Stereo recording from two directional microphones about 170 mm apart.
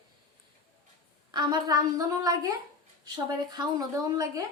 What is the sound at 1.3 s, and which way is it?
A woman's voice, 25° right (ahead or behind).